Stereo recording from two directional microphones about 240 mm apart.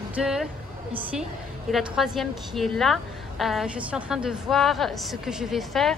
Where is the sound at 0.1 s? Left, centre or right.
Centre.